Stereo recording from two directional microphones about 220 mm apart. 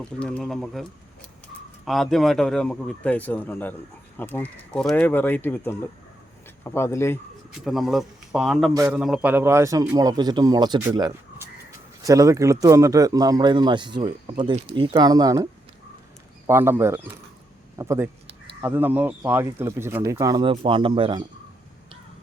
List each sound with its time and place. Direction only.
0.0 s speech: 5° left (ahead or behind)
7.6 s a man's voice: centre (ahead or behind); by 15.4 s 15° right (ahead or behind)
16.5 s a man's voice: 10° right (ahead or behind)